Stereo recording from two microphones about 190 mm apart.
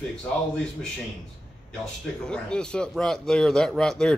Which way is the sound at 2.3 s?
5° left (ahead or behind).